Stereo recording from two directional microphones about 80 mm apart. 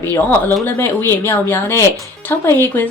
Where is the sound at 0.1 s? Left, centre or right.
Left.